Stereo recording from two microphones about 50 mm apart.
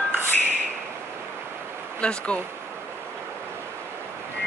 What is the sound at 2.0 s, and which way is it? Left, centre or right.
Speech, left.